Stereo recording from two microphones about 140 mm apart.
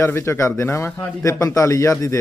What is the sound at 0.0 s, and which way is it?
A man's voice, 20° left (ahead or behind).